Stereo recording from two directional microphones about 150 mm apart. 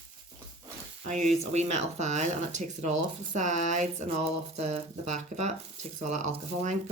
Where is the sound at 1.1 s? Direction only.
50° right (ahead or behind).